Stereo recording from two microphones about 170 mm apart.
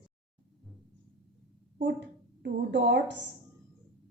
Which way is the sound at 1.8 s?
90° right.